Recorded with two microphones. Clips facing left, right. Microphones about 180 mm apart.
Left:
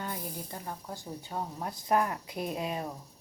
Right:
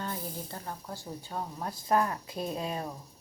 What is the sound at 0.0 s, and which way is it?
A woman's voice, 15° left (ahead or behind).